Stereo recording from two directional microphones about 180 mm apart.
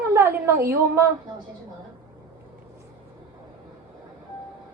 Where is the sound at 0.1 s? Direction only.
15° right (ahead or behind).